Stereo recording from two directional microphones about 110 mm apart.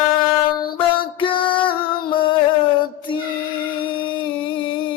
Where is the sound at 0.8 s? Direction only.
50° left (ahead or behind).